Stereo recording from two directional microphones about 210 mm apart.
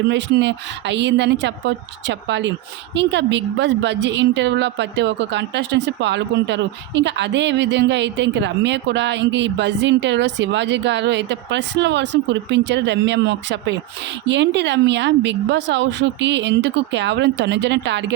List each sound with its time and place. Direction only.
0.1 s a woman's voice: 55° right (ahead or behind)